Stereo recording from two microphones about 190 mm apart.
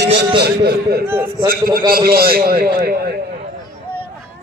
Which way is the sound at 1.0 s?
10° right (ahead or behind).